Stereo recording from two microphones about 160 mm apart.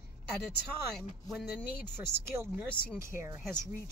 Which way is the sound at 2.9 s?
15° right (ahead or behind).